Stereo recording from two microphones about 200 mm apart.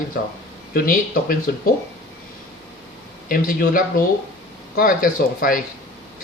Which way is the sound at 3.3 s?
45° left (ahead or behind).